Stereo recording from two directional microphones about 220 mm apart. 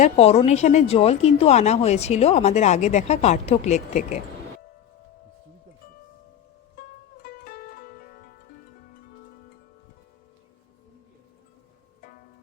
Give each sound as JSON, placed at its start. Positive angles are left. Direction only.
{"t": 0.0, "sound": "a woman's voice", "side_deg": 30}
{"t": 7.2, "sound": "music", "side_deg": 40}